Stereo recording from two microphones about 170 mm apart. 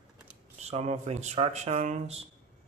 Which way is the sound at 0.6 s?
40° right (ahead or behind).